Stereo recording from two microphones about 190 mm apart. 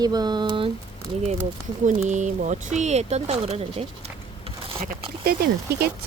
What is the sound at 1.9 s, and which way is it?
Speech, 40° right (ahead or behind).